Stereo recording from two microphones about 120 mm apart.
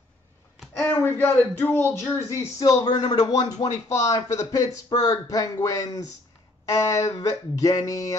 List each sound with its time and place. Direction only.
0.7 s speech: 20° left (ahead or behind)
2.2 s speech: 30° left (ahead or behind)